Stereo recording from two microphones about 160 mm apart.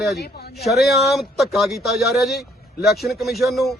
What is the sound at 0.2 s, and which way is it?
Speech, 80° left.